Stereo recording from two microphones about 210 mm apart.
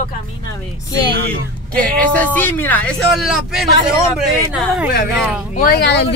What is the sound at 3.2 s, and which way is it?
A man's voice, centre (ahead or behind).